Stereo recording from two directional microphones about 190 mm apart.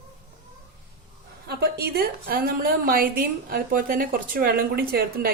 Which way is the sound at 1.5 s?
55° right (ahead or behind).